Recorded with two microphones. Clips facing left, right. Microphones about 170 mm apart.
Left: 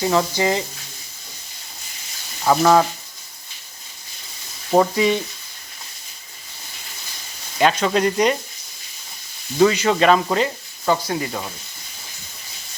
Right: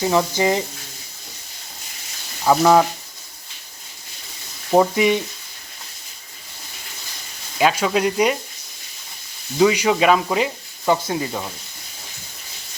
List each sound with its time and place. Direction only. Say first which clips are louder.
0.0 s speech: right 1 dB; 15° right (ahead or behind)
2.4 s speech: right 1 dB; 5° right (ahead or behind)
4.7 s speech: right 1 dB; 15° right (ahead or behind)
7.6 s speech: left 1 dB; 5° right (ahead or behind)
9.6 s speech: even; 10° right (ahead or behind)
11.0 s speech: right 1 dB; 20° right (ahead or behind)
11.3 s speech: right 1 dB; 5° right (ahead or behind)